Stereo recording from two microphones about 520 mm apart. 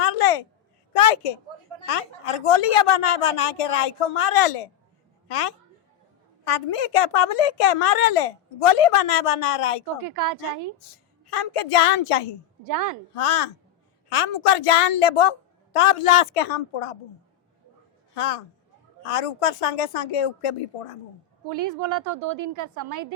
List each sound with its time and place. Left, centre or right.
0.0 s a sound: left
0.9 s a woman's voice: left
10.0 s a woman's voice: right
10.8 s a woman's voice: left
12.6 s a woman's voice: right
13.1 s a woman's voice: left
18.1 s a man's voice: left
21.5 s a woman's voice: right